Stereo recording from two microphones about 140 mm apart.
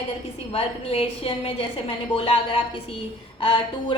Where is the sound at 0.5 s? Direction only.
45° left (ahead or behind).